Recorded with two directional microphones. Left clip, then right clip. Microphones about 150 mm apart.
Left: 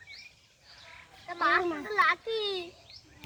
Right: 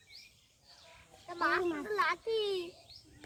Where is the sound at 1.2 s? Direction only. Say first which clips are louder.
Left 5 dB; 30° left (ahead or behind).